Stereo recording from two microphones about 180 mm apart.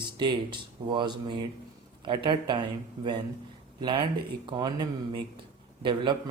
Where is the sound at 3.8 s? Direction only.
25° right (ahead or behind).